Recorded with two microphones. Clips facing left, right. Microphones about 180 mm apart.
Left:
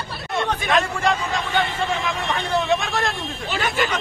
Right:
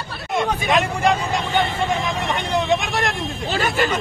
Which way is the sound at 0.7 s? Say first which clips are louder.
Right 2 dB; 20° right (ahead or behind).